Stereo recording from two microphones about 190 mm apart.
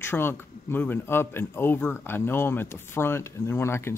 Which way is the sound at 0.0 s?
10° left (ahead or behind).